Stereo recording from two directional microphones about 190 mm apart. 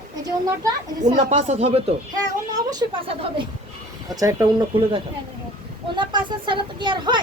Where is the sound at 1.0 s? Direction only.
40° right (ahead or behind).